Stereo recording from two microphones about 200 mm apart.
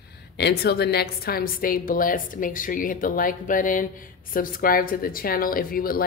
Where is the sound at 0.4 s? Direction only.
55° left (ahead or behind).